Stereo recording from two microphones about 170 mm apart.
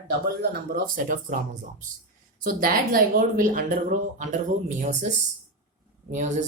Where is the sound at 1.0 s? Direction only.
55° right (ahead or behind).